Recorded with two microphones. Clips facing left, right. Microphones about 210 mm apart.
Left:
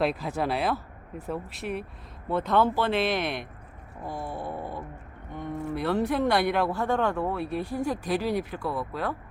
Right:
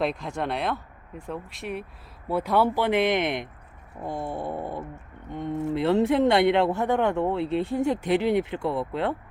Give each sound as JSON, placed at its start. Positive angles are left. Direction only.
{"t": 0.0, "sound": "speech", "side_deg": 5}